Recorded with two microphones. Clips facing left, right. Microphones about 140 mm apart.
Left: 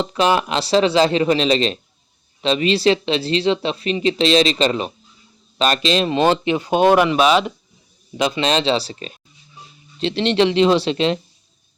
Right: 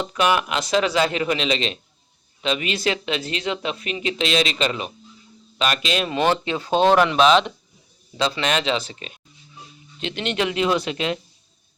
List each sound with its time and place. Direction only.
0.0 s speech: 30° left (ahead or behind); by 7.5 s 5° left (ahead or behind)
8.1 s speech: 20° left (ahead or behind)